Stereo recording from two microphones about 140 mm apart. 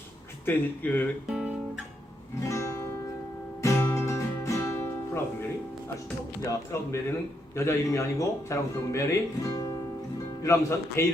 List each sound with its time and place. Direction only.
0.4 s speech: 15° left (ahead or behind)
1.3 s guitar: 5° right (ahead or behind)
2.4 s music: 20° left (ahead or behind)
6.4 s speech: 20° left (ahead or behind)